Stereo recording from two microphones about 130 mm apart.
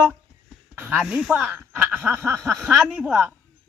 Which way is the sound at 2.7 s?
5° right (ahead or behind).